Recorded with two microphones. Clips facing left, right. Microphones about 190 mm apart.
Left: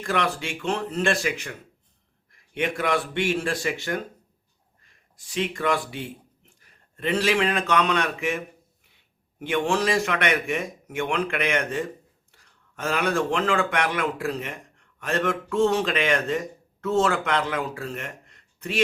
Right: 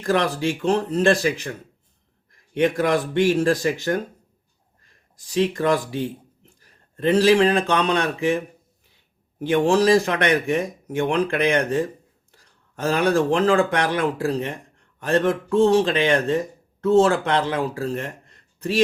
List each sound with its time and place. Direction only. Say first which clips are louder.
0.0 s speech: right 5 dB; 35° right (ahead or behind)
2.6 s speech: right 6 dB; 40° right (ahead or behind)
5.1 s a man's voice: right 7 dB; 40° right (ahead or behind)
9.4 s speech: right 6 dB; 35° right (ahead or behind)